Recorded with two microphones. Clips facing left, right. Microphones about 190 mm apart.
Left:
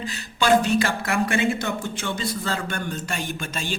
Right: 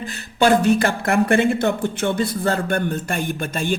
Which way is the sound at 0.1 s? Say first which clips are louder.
Right 3 dB; 55° right (ahead or behind).